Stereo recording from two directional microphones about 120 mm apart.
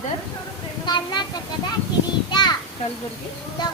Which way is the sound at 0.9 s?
35° left (ahead or behind).